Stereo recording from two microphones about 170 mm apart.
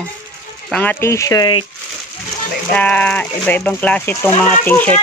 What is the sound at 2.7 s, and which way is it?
Speech, 10° left (ahead or behind).